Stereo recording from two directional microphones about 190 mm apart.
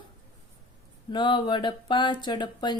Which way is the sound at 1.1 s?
25° left (ahead or behind).